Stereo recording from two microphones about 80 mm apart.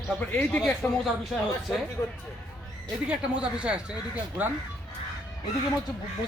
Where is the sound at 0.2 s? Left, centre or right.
Centre.